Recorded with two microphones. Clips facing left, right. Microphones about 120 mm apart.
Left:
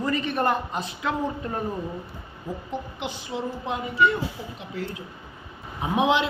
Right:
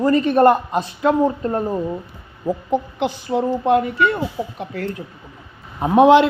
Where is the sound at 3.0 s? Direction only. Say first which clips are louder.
Right 10 dB; 55° right (ahead or behind).